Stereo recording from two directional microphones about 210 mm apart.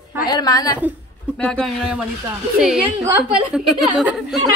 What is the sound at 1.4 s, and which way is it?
Speech, centre (ahead or behind).